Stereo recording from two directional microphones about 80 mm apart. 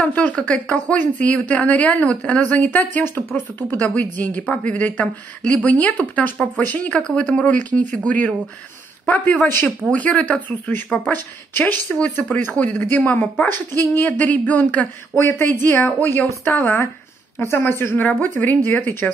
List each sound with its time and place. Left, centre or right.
0.0 s speech: centre
15.2 s speech: left